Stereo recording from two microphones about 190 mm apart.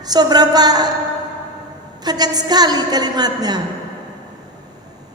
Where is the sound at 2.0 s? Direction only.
20° right (ahead or behind).